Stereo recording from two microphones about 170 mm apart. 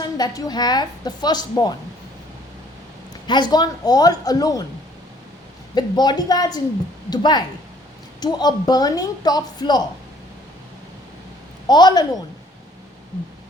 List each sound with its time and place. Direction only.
0.0 s a woman's voice: 25° left (ahead or behind)
3.2 s a woman's voice: 25° left (ahead or behind)
5.7 s a woman's voice: 25° left (ahead or behind)
11.7 s a woman's voice: 25° left (ahead or behind)